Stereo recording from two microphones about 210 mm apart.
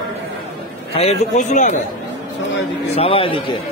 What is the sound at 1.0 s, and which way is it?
Speech, 35° left (ahead or behind).